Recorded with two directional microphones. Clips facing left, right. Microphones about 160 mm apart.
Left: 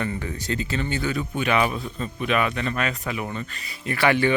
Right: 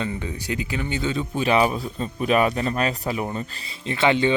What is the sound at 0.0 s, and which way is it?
Speech, 15° right (ahead or behind).